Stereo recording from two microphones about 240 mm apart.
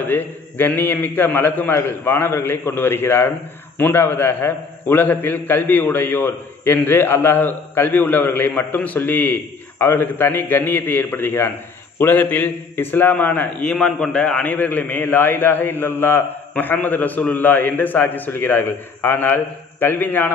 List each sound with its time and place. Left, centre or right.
0.0 s a man's voice: centre